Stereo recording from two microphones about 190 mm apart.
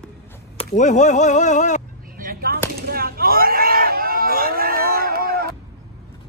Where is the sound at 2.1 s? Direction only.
50° right (ahead or behind).